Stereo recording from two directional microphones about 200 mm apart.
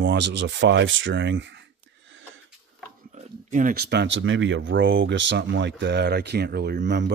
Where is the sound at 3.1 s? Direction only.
40° right (ahead or behind); by 7.1 s 60° right (ahead or behind).